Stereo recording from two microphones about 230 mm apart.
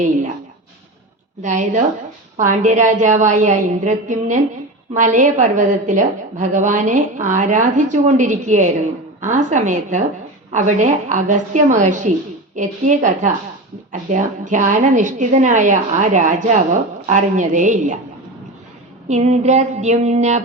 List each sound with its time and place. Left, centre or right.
1.4 s a woman's voice: right
19.0 s a woman's voice: right